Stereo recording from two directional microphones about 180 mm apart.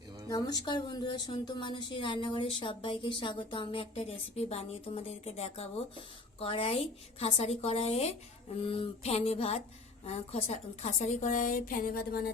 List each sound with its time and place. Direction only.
0.3 s a woman's voice: 20° left (ahead or behind); by 12.3 s 55° left (ahead or behind)